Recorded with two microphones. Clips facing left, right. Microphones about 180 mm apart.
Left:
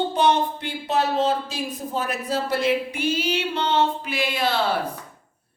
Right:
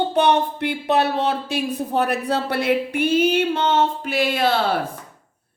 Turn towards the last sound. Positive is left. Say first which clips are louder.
# right 3 dB
turn(degrees=-50)  # may be behind; listen again after turning